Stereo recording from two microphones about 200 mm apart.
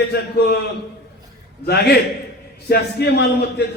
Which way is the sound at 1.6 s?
55° left (ahead or behind).